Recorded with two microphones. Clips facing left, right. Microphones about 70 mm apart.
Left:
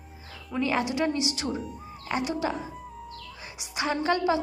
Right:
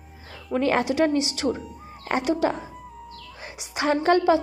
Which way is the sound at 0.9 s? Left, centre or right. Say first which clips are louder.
Right 5 dB; right.